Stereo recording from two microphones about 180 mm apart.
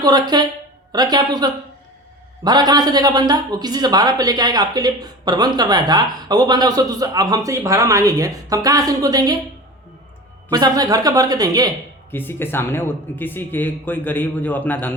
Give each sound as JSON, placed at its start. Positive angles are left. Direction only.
{"t": 0.0, "sound": "speech", "side_deg": -20}
{"t": 10.5, "sound": "speech", "side_deg": -20}
{"t": 12.1, "sound": "speech", "side_deg": 10}